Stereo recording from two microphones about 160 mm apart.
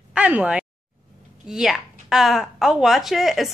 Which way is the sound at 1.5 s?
5° right (ahead or behind).